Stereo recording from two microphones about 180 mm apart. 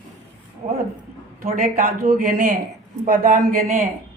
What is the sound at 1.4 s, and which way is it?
Speech, 40° right (ahead or behind).